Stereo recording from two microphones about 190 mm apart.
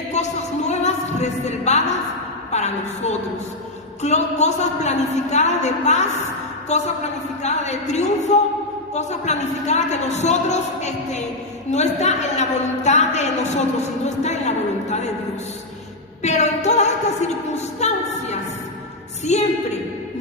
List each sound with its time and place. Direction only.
0.1 s music: 35° left (ahead or behind)
2.5 s a woman's voice: 35° left (ahead or behind)
14.2 s a sound: 35° left (ahead or behind)
16.2 s a woman's voice: 35° left (ahead or behind)